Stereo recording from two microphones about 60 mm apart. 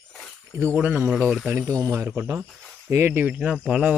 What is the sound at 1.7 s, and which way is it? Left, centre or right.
Speech, right.